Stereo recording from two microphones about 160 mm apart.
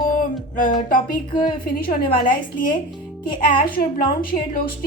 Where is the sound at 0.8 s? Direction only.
60° left (ahead or behind).